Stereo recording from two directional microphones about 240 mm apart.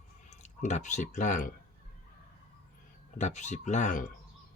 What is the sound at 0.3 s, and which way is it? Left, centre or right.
Speech, left.